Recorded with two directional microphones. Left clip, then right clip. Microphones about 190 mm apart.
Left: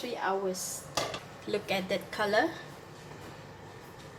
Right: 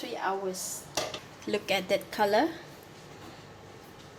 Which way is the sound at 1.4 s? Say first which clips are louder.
Right 3 dB; 45° right (ahead or behind).